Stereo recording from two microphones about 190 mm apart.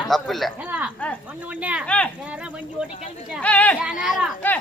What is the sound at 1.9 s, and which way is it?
Speech, 5° left (ahead or behind).